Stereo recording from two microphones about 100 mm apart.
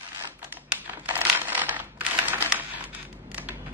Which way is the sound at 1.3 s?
20° right (ahead or behind).